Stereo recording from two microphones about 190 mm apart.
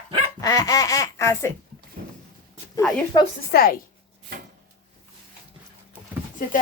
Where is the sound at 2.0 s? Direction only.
55° right (ahead or behind).